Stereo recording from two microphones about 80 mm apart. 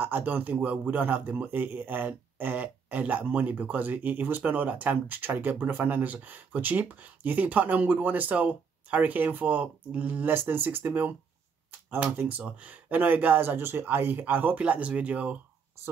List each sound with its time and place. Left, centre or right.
0.0 s speech: right